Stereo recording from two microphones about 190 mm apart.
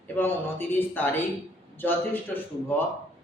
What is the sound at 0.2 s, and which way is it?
A man's voice, 10° left (ahead or behind).